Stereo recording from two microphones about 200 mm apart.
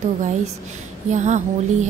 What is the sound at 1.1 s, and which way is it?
Speech, 35° right (ahead or behind).